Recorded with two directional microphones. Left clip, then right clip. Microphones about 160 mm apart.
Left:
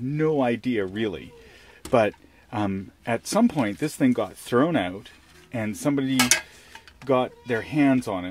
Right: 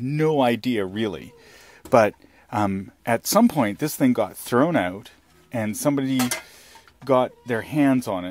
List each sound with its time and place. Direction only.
0.1 s speech: 40° right (ahead or behind)